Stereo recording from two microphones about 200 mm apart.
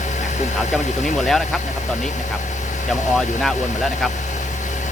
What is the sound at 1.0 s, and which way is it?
Speech, centre (ahead or behind).